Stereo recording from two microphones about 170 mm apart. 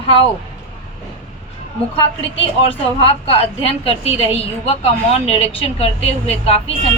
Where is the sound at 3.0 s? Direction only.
35° left (ahead or behind).